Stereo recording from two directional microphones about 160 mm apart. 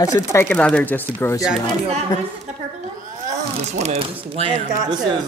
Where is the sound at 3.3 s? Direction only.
45° right (ahead or behind).